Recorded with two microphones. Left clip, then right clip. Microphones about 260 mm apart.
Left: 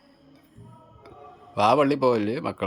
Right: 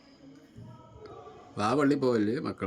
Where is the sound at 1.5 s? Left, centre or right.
Centre.